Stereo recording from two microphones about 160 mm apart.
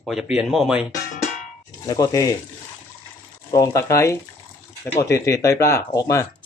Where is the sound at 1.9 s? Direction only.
20° left (ahead or behind).